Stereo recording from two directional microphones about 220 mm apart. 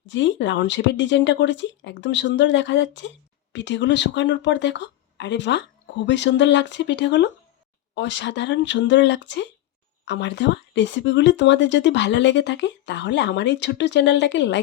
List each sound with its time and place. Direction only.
0.0 s speech: 55° left (ahead or behind)